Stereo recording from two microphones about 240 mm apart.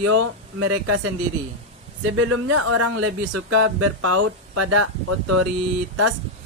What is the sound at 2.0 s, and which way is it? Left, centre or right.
Speech, right.